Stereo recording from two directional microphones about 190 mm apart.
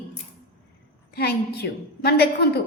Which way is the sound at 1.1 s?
55° left (ahead or behind).